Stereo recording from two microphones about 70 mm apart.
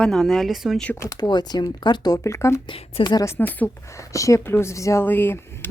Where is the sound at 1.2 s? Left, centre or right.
Left.